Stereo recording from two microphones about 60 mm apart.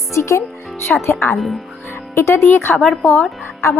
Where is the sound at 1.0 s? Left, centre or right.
Left.